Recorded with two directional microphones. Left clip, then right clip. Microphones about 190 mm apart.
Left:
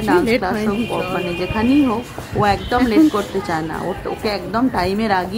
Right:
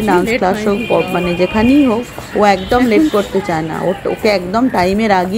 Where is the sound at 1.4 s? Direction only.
20° right (ahead or behind).